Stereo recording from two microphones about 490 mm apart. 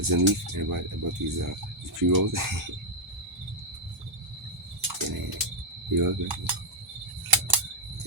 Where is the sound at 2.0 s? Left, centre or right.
Right.